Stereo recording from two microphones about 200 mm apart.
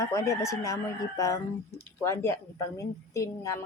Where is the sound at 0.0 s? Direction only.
15° left (ahead or behind).